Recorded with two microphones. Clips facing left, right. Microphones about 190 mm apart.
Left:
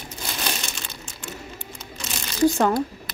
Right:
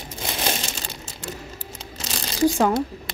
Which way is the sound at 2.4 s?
10° right (ahead or behind).